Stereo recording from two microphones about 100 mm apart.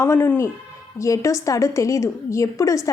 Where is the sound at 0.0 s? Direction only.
25° left (ahead or behind).